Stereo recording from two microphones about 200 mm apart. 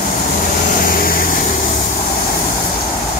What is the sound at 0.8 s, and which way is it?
Vehicle, 45° left (ahead or behind).